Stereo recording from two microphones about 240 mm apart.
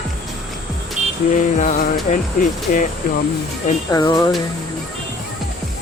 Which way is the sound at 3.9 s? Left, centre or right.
Centre.